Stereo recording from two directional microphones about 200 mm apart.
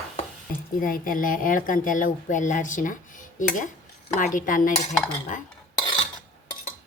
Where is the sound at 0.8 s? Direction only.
45° left (ahead or behind).